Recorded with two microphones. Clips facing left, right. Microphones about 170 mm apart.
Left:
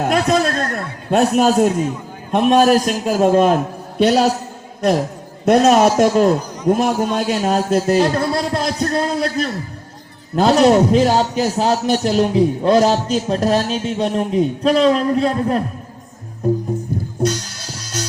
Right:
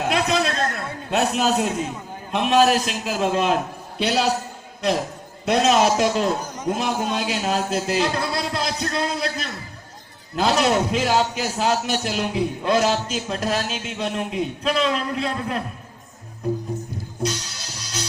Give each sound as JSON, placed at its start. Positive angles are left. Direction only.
{"t": 0.0, "sound": "a sound", "side_deg": 45}
{"t": 2.3, "sound": "a man's voice", "side_deg": 45}
{"t": 5.5, "sound": "a man's voice", "side_deg": 45}
{"t": 16.4, "sound": "music", "side_deg": 45}